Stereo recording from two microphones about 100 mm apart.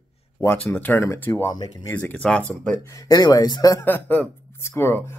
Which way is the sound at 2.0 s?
15° left (ahead or behind).